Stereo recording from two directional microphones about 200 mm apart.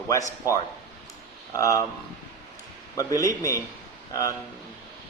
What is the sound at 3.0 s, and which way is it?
A man's voice, 15° left (ahead or behind).